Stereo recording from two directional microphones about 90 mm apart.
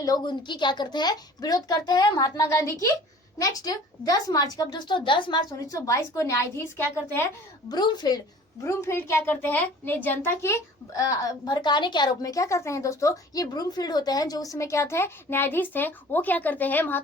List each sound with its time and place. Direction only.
0.0 s a woman's voice: 50° left (ahead or behind); by 7.3 s 25° left (ahead or behind)
7.7 s a woman's voice: 55° left (ahead or behind)
8.6 s a child's voice: 30° left (ahead or behind)